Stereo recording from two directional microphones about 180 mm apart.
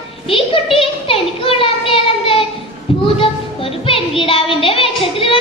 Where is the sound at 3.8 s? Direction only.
30° left (ahead or behind).